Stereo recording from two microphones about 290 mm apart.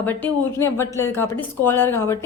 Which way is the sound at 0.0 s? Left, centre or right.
Centre.